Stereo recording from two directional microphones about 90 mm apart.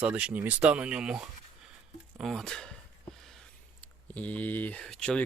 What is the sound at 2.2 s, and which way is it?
Speech, 5° left (ahead or behind).